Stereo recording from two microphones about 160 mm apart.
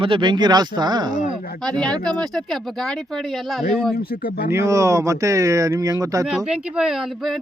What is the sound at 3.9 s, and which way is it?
Speech, 90° left.